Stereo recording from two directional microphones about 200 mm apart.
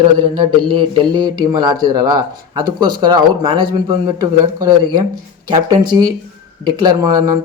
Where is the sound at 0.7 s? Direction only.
20° right (ahead or behind).